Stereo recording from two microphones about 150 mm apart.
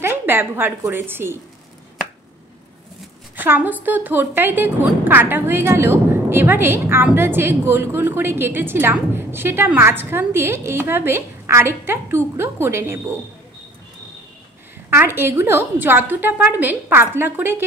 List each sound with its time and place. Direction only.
0.0 s a woman's voice: 15° right (ahead or behind)
3.3 s a woman's voice: 10° right (ahead or behind)
14.9 s a woman's voice: 15° right (ahead or behind)